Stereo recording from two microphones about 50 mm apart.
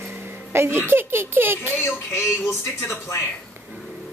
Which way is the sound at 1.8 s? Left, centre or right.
Left.